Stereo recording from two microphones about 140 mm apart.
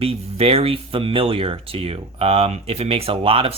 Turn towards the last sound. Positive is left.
turn(degrees=-40)  # may be behind; listen again after turning